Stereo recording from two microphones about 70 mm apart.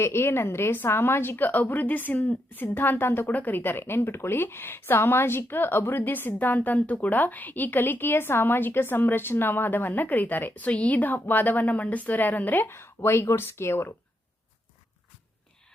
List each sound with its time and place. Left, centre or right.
0.0 s a woman's voice: left
12.6 s a woman's voice: left